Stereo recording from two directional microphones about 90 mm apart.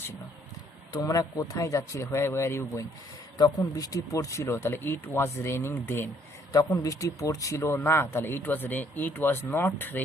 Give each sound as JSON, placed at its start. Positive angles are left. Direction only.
{"t": 1.0, "sound": "speech", "side_deg": 40}
{"t": 3.3, "sound": "speech", "side_deg": 45}
{"t": 6.5, "sound": "speech", "side_deg": 40}